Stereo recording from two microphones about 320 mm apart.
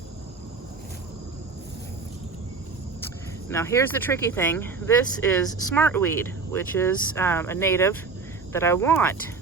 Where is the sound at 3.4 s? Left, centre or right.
Centre.